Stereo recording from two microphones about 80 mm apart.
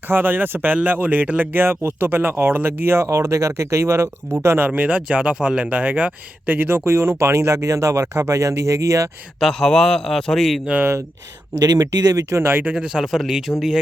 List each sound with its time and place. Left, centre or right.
0.1 s speech: right
4.7 s speech: centre; by 9.0 s right
9.4 s a man's voice: centre
11.6 s speech: right
12.3 s speech: right
12.7 s a man's voice: centre